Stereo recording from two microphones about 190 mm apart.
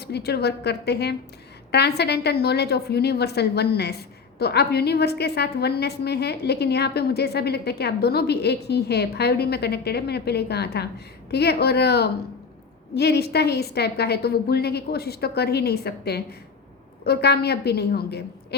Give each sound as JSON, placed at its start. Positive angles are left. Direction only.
{"t": 0.0, "sound": "a woman's voice", "side_deg": 60}